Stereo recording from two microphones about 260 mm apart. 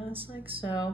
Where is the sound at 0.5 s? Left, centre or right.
Right.